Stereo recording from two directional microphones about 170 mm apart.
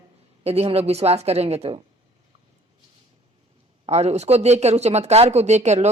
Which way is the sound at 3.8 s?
40° right (ahead or behind).